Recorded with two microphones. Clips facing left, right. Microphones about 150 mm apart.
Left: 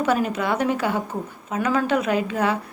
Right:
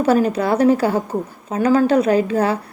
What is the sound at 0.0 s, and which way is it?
A woman's voice, 35° right (ahead or behind).